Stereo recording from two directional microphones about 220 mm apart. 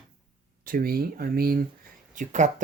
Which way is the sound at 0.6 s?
40° right (ahead or behind).